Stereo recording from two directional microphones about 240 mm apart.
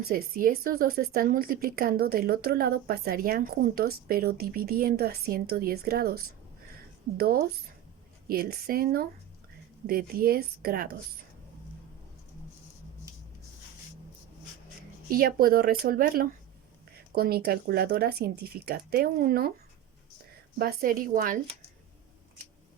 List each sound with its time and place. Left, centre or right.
0.1 s a woman's voice: right
15.1 s a woman's voice: right
20.6 s a woman's voice: right